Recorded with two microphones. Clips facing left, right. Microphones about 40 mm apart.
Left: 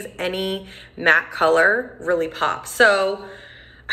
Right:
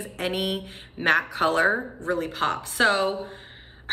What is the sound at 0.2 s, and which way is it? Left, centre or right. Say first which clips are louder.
A woman's voice: left 3 dB; left.